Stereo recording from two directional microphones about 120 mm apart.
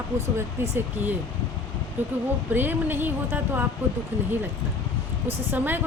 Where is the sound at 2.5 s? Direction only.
15° right (ahead or behind).